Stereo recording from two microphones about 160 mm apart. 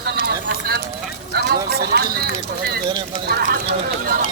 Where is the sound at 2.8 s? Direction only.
30° right (ahead or behind).